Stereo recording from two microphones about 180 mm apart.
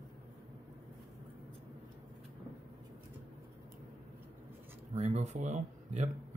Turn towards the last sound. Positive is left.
turn(degrees=-40)  # may be behind; listen again after turning